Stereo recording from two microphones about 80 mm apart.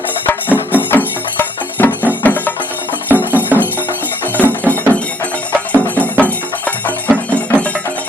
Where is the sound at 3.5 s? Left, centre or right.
Right.